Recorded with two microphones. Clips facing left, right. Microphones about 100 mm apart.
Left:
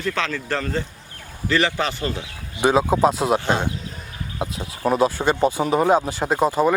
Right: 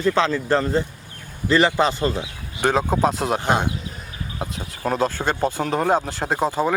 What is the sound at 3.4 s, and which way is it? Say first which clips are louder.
Speech: right 1 dB; 15° right (ahead or behind).